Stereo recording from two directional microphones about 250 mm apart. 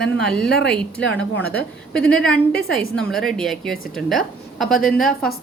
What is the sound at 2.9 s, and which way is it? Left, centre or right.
A woman's voice, centre.